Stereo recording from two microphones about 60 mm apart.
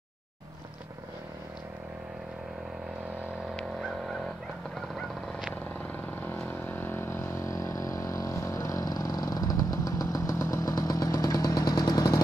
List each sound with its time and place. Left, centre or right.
6.4 s vehicle: left
7.4 s vehicle: left